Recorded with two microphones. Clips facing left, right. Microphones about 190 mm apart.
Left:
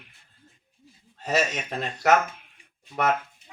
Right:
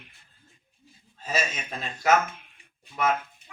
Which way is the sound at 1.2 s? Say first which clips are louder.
Left 5 dB; 70° left (ahead or behind).